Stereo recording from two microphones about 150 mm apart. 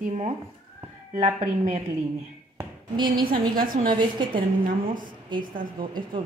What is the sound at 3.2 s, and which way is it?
Speech, 75° right (ahead or behind).